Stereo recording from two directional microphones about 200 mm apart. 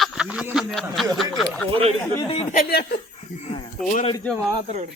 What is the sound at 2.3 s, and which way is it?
Speech, 30° left (ahead or behind).